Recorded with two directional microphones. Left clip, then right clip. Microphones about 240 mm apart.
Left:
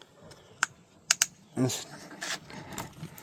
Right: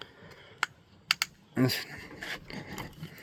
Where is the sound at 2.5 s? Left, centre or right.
Right.